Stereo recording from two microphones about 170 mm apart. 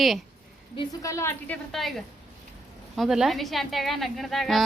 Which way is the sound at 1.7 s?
Centre (ahead or behind).